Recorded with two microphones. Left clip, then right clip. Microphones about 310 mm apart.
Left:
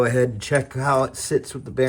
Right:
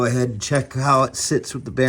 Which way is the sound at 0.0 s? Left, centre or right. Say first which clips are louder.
Left 2 dB; centre.